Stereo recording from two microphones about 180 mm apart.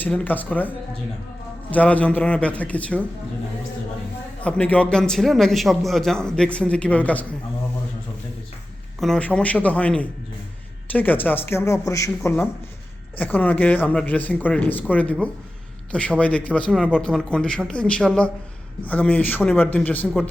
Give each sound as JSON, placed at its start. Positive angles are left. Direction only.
{"t": 0.0, "sound": "speech", "side_deg": 10}
{"t": 1.7, "sound": "speech", "side_deg": 10}
{"t": 4.4, "sound": "a man's voice", "side_deg": 5}
{"t": 9.0, "sound": "a man's voice", "side_deg": 5}